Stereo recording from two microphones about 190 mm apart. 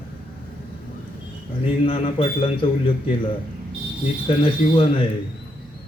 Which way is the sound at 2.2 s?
30° left (ahead or behind).